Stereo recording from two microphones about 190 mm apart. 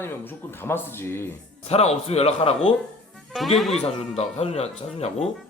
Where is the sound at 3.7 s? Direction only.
35° left (ahead or behind).